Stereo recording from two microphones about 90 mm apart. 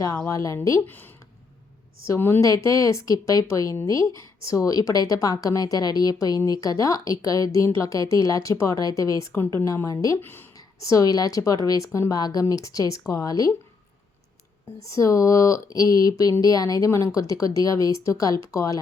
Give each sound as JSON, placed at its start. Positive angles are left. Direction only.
{"t": 0.3, "sound": "a woman's voice", "side_deg": 35}
{"t": 0.9, "sound": "a woman's voice", "side_deg": 20}
{"t": 2.4, "sound": "a woman's voice", "side_deg": 40}
{"t": 10.2, "sound": "a woman's voice", "side_deg": 25}
{"t": 10.8, "sound": "a woman's voice", "side_deg": 40}
{"t": 14.8, "sound": "a woman's voice", "side_deg": 40}